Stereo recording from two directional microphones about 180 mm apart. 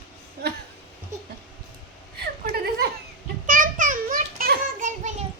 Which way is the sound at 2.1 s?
60° right (ahead or behind).